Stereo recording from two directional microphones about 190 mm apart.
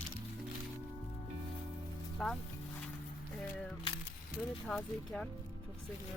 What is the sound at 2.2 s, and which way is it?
Speech, centre (ahead or behind).